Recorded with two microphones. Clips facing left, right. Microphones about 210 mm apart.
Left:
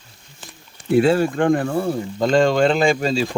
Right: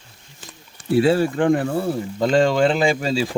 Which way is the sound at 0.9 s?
50° left (ahead or behind).